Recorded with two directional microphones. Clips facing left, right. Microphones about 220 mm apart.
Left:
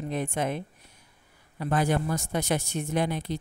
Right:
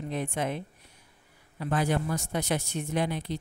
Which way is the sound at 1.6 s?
45° left (ahead or behind).